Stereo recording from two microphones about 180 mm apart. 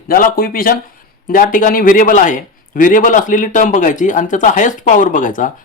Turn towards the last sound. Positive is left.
turn(degrees=45)  # may be behind; listen again after turning